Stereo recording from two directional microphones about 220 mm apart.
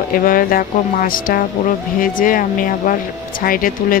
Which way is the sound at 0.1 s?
40° left (ahead or behind).